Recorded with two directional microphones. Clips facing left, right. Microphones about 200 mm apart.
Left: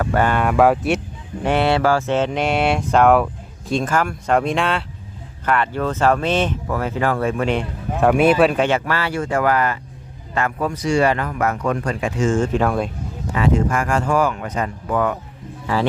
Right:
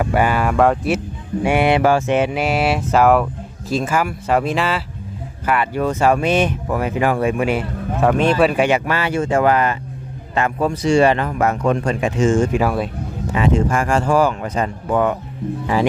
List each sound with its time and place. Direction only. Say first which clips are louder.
0.0 s speech: right 1 dB; 10° right (ahead or behind)
8.5 s speech: right 2 dB; 15° right (ahead or behind)
12.4 s speech: right 1 dB; 10° right (ahead or behind)
13.3 s speech: right 1 dB; 25° right (ahead or behind)
15.6 s speech: right 2 dB; 15° right (ahead or behind)